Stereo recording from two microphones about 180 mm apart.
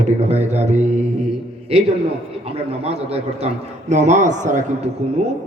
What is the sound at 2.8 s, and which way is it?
A man's voice, 35° right (ahead or behind).